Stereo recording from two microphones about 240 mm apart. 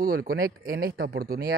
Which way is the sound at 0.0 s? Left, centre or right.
Right.